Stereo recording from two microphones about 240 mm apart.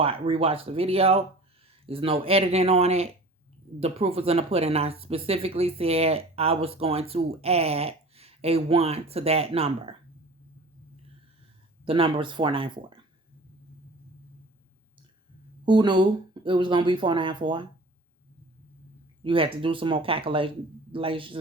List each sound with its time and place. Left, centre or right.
0.0 s speech: right
11.9 s speech: right
15.6 s speech: centre
19.2 s speech: right